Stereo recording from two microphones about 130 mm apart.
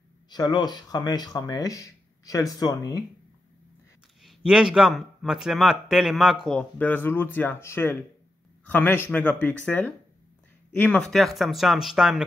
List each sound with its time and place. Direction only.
0.3 s speech: 30° left (ahead or behind)
4.2 s a man's voice: 5° right (ahead or behind)
6.4 s a man's voice: 10° left (ahead or behind)